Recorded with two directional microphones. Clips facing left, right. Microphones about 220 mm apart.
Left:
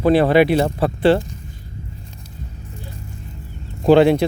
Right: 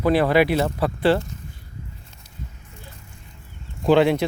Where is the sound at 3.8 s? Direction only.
35° left (ahead or behind).